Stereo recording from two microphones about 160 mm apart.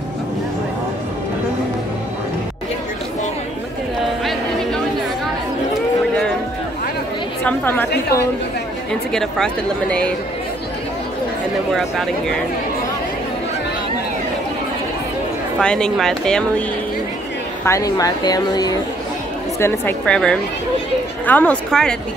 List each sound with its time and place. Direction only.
4.2 s a sound: centre (ahead or behind)
7.4 s a woman's voice: 10° left (ahead or behind)
9.1 s speech: 5° left (ahead or behind)
11.7 s speech: centre (ahead or behind)
15.6 s speech: 5° left (ahead or behind)
17.6 s a woman's voice: 20° left (ahead or behind); by 21.9 s 5° left (ahead or behind)